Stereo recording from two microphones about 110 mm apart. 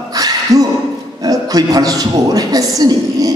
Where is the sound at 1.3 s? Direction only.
35° right (ahead or behind).